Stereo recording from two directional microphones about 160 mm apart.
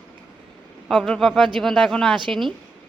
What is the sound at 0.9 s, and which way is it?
A woman's voice, 5° left (ahead or behind).